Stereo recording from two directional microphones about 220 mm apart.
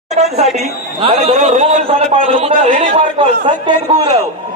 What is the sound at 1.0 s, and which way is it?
A man's voice, 25° right (ahead or behind).